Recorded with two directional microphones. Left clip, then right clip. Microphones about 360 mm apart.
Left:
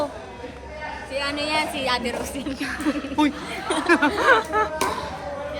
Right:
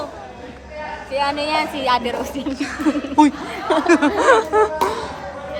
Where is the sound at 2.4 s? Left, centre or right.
Centre.